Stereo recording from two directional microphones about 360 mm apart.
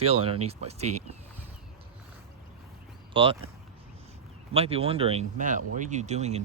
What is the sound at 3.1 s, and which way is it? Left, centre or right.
Speech, centre.